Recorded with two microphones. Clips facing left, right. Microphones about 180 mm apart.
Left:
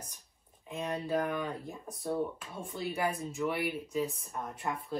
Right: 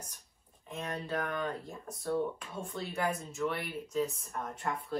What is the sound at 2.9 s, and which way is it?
Speech, 15° left (ahead or behind).